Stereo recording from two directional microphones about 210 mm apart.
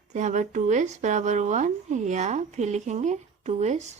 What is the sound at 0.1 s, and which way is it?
A woman's voice, 35° right (ahead or behind).